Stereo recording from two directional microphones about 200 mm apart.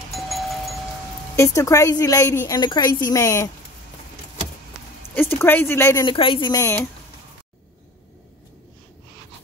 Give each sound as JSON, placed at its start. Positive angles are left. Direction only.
{"t": 0.1, "sound": "music", "side_deg": 0}
{"t": 1.3, "sound": "a woman's voice", "side_deg": 15}
{"t": 5.4, "sound": "a woman's voice", "side_deg": 10}
{"t": 6.0, "sound": "speech", "side_deg": 25}